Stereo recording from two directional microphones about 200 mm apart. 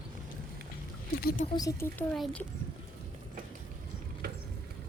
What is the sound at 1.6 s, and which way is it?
Speech, 15° left (ahead or behind).